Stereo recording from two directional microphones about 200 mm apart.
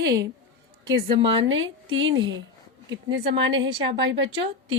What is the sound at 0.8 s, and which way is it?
Speech, 20° right (ahead or behind).